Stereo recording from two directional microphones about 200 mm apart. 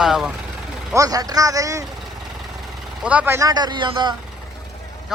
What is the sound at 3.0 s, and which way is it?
Speech, 5° right (ahead or behind).